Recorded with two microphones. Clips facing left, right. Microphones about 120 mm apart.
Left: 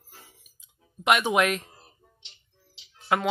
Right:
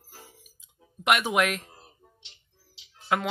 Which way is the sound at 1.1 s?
Centre (ahead or behind).